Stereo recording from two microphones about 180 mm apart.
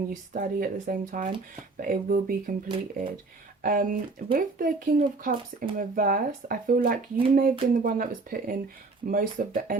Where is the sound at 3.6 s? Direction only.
50° right (ahead or behind).